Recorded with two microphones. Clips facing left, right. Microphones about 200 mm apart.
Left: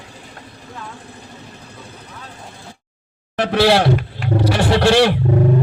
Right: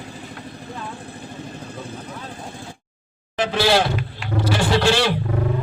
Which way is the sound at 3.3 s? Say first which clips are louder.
Left 4 dB; 65° left (ahead or behind).